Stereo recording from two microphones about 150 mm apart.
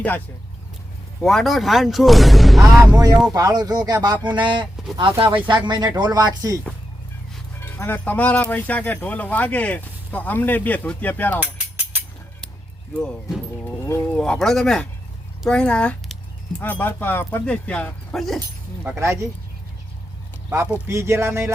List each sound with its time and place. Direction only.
1.2 s speech: centre (ahead or behind)
2.6 s speech: 20° right (ahead or behind)
7.6 s speech: 15° left (ahead or behind)
13.0 s music: 5° left (ahead or behind)
13.8 s speech: 15° left (ahead or behind)
14.2 s speech: 5° left (ahead or behind)
18.3 s speech: 15° right (ahead or behind)
20.5 s speech: 15° right (ahead or behind)